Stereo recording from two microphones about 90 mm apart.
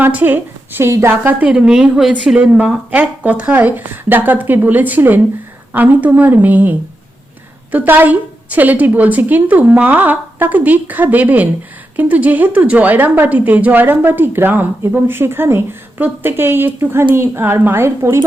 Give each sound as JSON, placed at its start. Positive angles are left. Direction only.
{"t": 0.0, "sound": "a woman's voice", "side_deg": -20}
{"t": 0.9, "sound": "a woman's voice", "side_deg": -35}
{"t": 1.1, "sound": "a woman's voice", "side_deg": -20}